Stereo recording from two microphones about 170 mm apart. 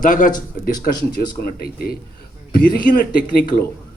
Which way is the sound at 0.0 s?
50° left (ahead or behind).